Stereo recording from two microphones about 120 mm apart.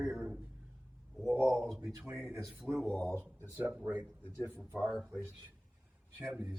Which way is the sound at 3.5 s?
10° right (ahead or behind).